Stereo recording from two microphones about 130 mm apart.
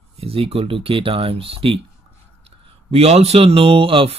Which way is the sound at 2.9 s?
50° right (ahead or behind).